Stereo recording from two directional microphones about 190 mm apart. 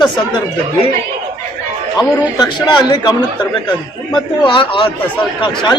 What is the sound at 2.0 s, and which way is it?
A man's voice, 20° left (ahead or behind).